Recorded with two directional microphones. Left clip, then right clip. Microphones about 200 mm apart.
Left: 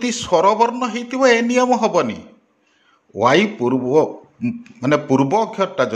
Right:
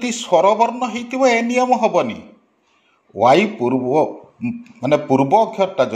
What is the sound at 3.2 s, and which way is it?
A man's voice, 20° left (ahead or behind).